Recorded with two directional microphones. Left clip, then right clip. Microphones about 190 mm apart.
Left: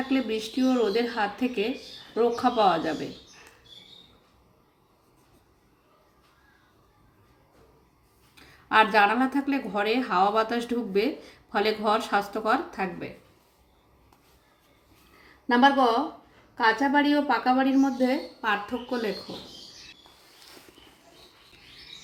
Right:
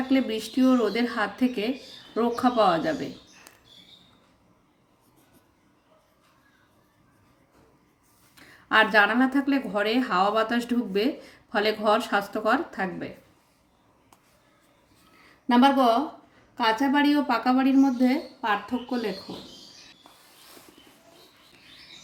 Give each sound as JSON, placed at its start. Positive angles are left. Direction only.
{"t": 0.1, "sound": "a woman's voice", "side_deg": -25}
{"t": 8.4, "sound": "a woman's voice", "side_deg": -20}
{"t": 15.4, "sound": "a woman's voice", "side_deg": -30}